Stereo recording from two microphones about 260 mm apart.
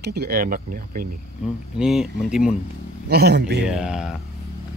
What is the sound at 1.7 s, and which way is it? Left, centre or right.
Cutlery, centre.